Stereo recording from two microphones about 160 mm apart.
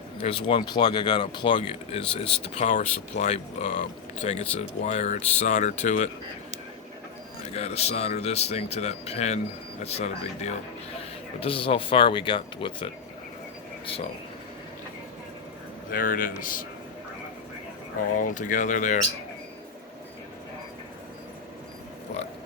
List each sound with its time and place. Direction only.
0.2 s speech: 35° left (ahead or behind); by 6.1 s 50° left (ahead or behind)
7.5 s speech: 40° left (ahead or behind)
15.9 s speech: 60° left (ahead or behind)
18.1 s speech: 55° left (ahead or behind)